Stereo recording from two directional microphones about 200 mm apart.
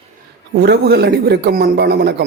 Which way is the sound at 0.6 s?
55° right (ahead or behind).